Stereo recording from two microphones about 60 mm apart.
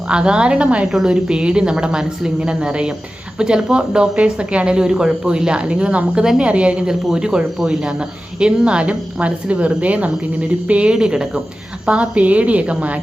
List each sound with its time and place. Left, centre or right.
0.1 s a woman's voice: centre
11.9 s a woman's voice: right